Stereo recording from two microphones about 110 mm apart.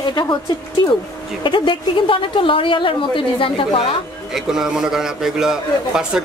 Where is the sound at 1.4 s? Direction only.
50° left (ahead or behind).